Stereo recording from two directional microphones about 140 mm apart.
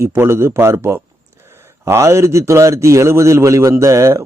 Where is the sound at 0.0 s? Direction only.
20° right (ahead or behind).